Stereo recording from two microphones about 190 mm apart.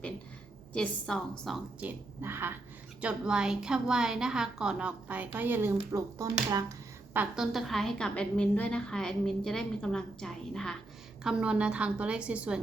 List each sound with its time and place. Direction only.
0.7 s a woman's voice: 5° left (ahead or behind); by 6.7 s 20° right (ahead or behind)
7.1 s a woman's voice: 5° right (ahead or behind)